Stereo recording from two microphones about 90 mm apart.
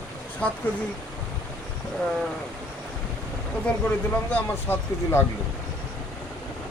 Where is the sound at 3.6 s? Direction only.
20° left (ahead or behind).